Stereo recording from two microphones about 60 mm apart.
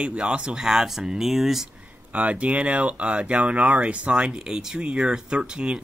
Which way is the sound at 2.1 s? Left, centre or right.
Right.